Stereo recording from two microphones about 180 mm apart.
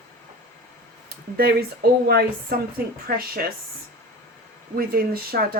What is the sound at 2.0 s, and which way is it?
Speech, 60° right (ahead or behind).